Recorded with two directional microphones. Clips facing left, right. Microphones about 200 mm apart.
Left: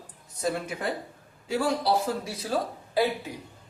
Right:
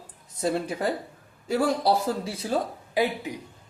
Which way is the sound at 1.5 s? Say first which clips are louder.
Right 3 dB; 45° right (ahead or behind).